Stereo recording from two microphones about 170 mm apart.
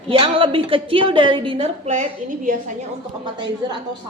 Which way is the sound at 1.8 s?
45° right (ahead or behind).